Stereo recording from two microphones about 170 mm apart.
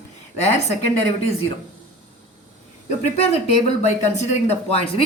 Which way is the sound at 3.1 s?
40° left (ahead or behind).